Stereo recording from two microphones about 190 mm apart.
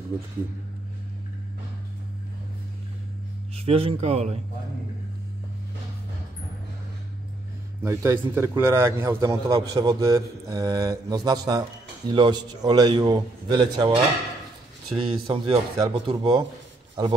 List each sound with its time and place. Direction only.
3.5 s speech: 30° right (ahead or behind)
7.8 s a man's voice: 15° right (ahead or behind)
15.0 s a man's voice: 30° right (ahead or behind)